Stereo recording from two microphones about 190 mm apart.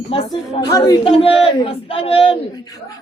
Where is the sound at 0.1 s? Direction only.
30° left (ahead or behind).